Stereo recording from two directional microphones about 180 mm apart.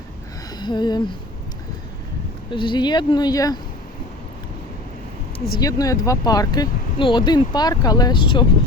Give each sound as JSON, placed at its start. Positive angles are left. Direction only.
{"t": 0.6, "sound": "speech", "side_deg": 25}
{"t": 2.5, "sound": "speech", "side_deg": 25}
{"t": 5.5, "sound": "speech", "side_deg": 20}